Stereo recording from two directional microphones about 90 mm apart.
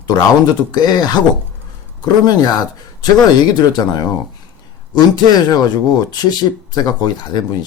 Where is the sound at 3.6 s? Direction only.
50° left (ahead or behind).